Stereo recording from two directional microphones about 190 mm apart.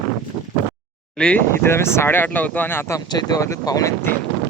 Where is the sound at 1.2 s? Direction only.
5° left (ahead or behind).